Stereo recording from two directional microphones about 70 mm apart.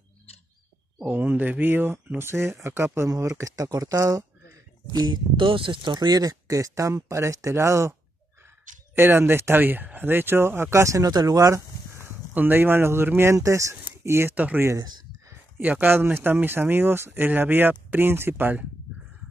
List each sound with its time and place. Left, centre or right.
1.0 s speech: right
4.9 s speech: right
8.9 s speech: right
12.4 s speech: right
13.4 s speech: right
14.0 s speech: right
14.3 s speech: right
15.6 s speech: right